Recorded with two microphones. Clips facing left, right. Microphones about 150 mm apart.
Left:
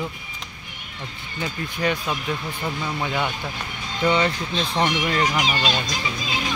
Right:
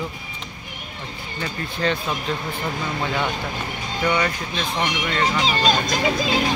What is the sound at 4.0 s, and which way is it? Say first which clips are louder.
Speech: left 2 dB; 25° left (ahead or behind).